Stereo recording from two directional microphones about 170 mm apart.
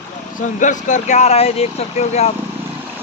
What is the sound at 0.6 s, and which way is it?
Speech, 45° left (ahead or behind).